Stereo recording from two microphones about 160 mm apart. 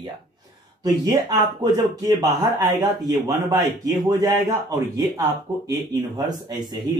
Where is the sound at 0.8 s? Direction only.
25° right (ahead or behind).